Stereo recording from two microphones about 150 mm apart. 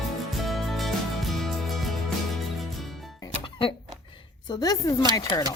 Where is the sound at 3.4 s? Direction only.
35° left (ahead or behind).